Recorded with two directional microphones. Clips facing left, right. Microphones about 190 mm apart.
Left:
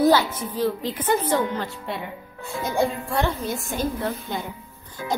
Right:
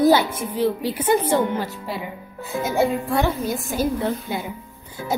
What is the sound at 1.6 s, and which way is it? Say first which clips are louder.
A woman's voice: right 2 dB; centre (ahead or behind).